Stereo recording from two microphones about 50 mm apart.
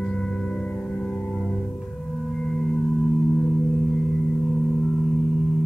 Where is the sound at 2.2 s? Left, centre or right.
Centre.